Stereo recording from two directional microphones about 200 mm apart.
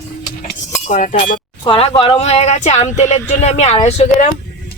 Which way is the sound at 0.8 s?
35° left (ahead or behind).